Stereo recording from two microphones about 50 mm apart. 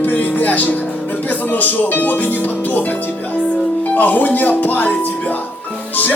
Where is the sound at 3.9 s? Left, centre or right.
Left.